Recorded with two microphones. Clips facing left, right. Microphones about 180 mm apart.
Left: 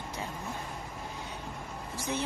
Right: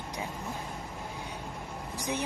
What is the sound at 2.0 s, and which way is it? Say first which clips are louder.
Speech: even; 15° right (ahead or behind).